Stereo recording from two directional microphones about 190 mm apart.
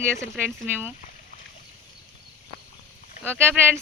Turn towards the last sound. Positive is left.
turn(degrees=-10)  # may be behind; listen again after turning